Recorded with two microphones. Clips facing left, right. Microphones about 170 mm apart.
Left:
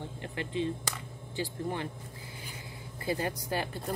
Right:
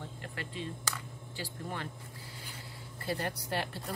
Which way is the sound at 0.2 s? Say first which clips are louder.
Left 9 dB; 20° left (ahead or behind).